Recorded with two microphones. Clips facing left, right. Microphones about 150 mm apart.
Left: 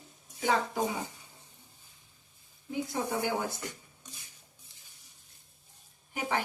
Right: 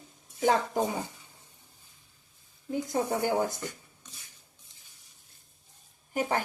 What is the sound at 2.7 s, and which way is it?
Speech, 45° right (ahead or behind).